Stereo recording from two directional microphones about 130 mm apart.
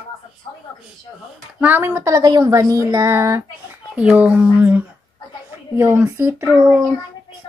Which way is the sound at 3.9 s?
10° right (ahead or behind).